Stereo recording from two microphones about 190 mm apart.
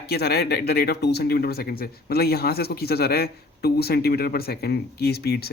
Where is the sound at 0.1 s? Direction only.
55° left (ahead or behind).